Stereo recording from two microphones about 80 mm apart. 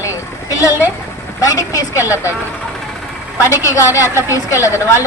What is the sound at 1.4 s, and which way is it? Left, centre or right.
Speech, left.